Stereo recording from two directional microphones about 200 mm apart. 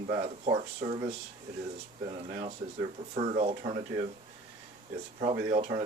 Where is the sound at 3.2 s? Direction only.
35° right (ahead or behind).